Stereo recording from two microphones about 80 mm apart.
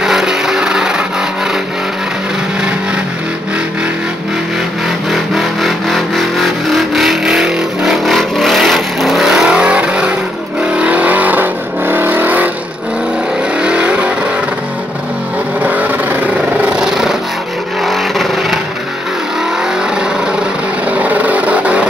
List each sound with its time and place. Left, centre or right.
0.0 s vehicle: centre
5.1 s vehicle: centre; by 12.4 s right
13.6 s vehicle: centre
15.6 s vehicle: centre
16.6 s a sound: centre
17.8 s vehicle: centre
20.9 s vehicle: centre